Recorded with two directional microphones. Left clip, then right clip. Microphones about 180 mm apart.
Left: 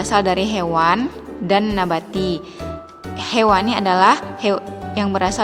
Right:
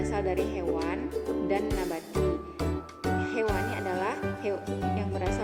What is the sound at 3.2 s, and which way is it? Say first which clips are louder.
Speech: left 17 dB; 20° left (ahead or behind).